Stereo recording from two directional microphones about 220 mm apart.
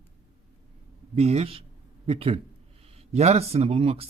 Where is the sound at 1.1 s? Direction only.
30° right (ahead or behind).